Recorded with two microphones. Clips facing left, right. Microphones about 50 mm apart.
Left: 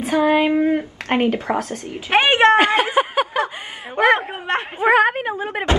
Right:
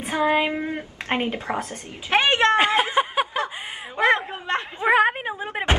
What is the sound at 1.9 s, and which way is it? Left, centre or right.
Speech, left.